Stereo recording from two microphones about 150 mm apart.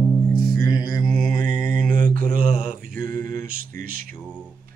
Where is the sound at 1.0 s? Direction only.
5° right (ahead or behind).